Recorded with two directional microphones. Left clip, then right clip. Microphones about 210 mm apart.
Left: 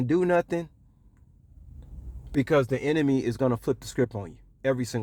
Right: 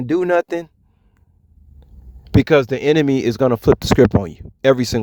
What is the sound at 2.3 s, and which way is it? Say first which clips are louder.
Speech: right 9 dB; 40° right (ahead or behind).